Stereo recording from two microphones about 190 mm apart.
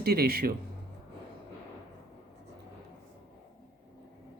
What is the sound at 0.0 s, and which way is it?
Speech, 55° right (ahead or behind).